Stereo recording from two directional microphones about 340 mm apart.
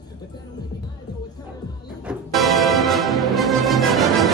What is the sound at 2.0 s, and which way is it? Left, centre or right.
Music, centre.